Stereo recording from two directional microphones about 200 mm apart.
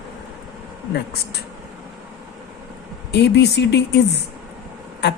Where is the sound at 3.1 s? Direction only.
55° left (ahead or behind).